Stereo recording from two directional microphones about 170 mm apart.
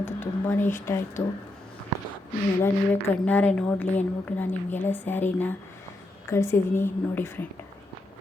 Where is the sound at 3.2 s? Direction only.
10° left (ahead or behind).